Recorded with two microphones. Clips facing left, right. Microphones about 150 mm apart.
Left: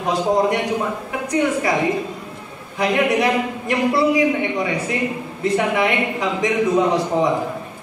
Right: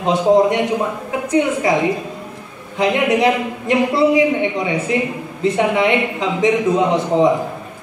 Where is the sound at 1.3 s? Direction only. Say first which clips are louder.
Right 3 dB; 20° right (ahead or behind).